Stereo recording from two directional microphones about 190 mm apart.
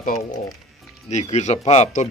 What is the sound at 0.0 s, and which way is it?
Speech, 45° left (ahead or behind).